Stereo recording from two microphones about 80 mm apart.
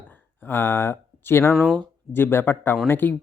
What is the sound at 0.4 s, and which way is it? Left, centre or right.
Speech, left.